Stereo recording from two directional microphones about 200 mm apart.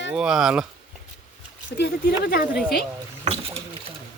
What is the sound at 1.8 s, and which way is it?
Speech, 50° left (ahead or behind).